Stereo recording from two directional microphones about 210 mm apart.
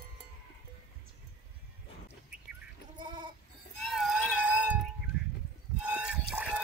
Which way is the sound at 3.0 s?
20° right (ahead or behind).